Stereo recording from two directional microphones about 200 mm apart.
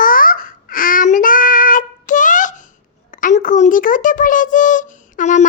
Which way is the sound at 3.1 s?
40° left (ahead or behind).